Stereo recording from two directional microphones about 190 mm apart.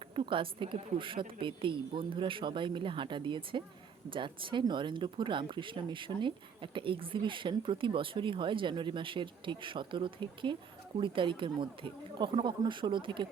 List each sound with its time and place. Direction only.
0.2 s speech: 25° right (ahead or behind)